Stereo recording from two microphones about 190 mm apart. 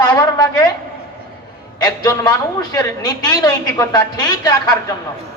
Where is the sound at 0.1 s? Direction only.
20° left (ahead or behind).